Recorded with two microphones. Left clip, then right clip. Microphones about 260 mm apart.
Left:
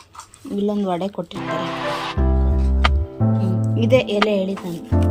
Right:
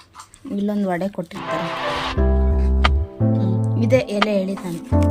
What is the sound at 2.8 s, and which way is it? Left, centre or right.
Music, centre.